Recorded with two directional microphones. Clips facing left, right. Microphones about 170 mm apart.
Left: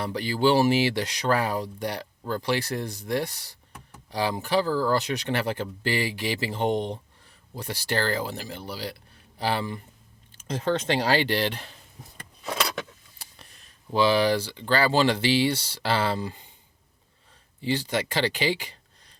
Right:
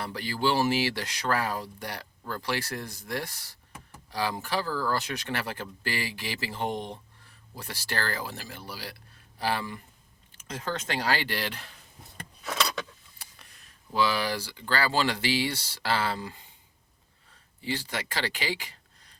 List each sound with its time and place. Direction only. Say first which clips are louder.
0.0 s speech: left 5 dB; 20° left (ahead or behind)
13.9 s speech: left 6 dB; 25° left (ahead or behind)
17.6 s speech: left 7 dB; 20° left (ahead or behind)